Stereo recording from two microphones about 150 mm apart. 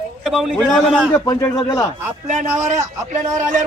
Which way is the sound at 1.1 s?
20° left (ahead or behind).